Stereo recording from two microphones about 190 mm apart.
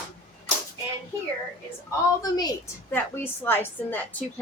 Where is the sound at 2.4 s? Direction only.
15° left (ahead or behind).